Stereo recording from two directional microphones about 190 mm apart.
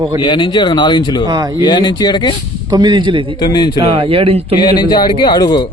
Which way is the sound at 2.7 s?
25° right (ahead or behind).